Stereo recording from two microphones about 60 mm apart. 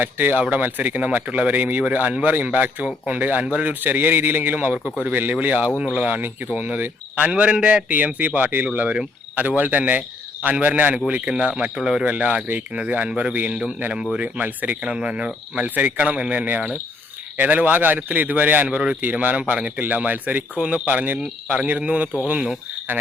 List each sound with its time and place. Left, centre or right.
0.0 s speech: right
11.3 s speech: centre
12.0 s speech: right
14.3 s speech: right
14.8 s speech: centre
19.0 s speech: right